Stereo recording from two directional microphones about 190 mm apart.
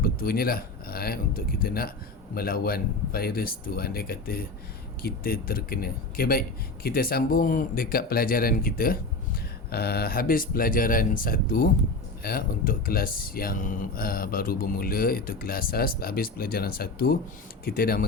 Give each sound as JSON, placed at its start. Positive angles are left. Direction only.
{"t": 0.0, "sound": "speech", "side_deg": 50}